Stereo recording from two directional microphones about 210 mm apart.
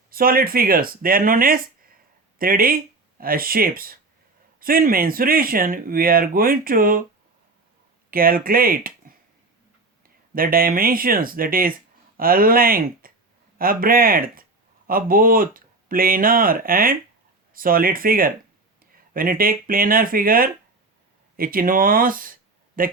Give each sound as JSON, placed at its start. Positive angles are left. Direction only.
{"t": 0.1, "sound": "speech", "side_deg": -45}
{"t": 8.1, "sound": "speech", "side_deg": -45}
{"t": 10.3, "sound": "speech", "side_deg": -45}